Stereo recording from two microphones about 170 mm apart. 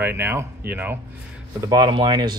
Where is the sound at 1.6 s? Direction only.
20° right (ahead or behind).